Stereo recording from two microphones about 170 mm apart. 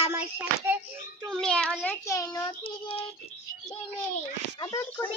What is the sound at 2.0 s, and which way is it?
Child singing, 20° left (ahead or behind).